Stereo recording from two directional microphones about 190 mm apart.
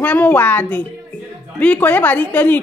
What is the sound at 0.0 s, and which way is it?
Speech, 10° left (ahead or behind).